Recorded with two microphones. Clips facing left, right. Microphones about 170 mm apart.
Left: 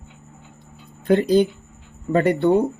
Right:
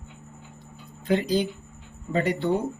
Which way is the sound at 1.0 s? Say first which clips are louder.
Left 7 dB; 55° left (ahead or behind).